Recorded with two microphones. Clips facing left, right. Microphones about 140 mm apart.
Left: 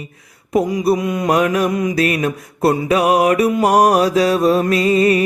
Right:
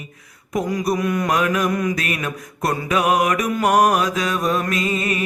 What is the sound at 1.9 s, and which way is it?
Mantra, 30° left (ahead or behind).